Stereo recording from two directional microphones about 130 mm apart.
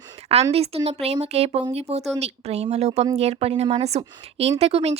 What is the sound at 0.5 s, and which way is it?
A woman's voice, 50° right (ahead or behind).